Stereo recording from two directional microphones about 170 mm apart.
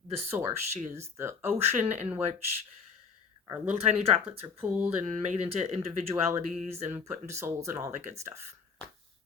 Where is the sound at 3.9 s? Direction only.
40° right (ahead or behind).